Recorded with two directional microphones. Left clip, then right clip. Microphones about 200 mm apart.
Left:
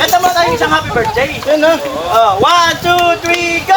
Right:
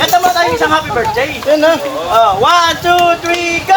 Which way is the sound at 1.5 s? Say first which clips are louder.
Right 1 dB; 30° right (ahead or behind).